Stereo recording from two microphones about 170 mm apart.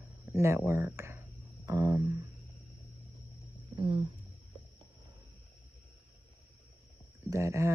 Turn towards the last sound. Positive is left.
turn(degrees=-15)  # may be behind; listen again after turning